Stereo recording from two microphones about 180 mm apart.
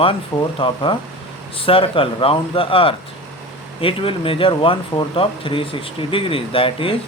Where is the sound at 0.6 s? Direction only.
30° left (ahead or behind).